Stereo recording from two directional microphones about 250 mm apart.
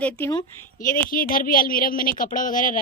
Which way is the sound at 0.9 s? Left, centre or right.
Left.